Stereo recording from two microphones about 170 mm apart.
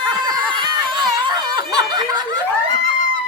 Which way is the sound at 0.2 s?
25° right (ahead or behind).